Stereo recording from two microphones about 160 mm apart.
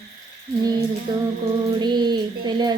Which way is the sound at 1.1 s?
25° right (ahead or behind).